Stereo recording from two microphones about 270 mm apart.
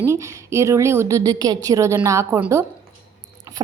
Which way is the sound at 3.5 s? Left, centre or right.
Centre.